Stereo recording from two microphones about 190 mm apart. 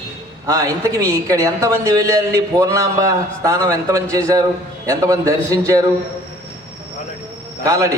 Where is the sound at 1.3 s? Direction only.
15° right (ahead or behind).